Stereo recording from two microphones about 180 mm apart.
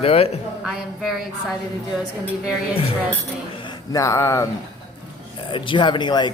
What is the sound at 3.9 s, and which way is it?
Speech, 15° left (ahead or behind).